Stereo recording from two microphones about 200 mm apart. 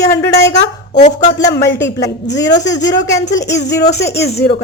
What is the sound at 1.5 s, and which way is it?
A woman's voice, 15° left (ahead or behind).